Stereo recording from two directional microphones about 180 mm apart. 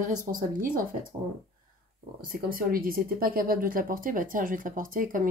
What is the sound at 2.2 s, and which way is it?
Speech, 55° right (ahead or behind).